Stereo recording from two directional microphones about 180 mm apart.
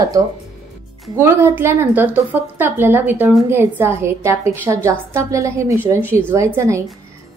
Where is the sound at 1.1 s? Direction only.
15° right (ahead or behind).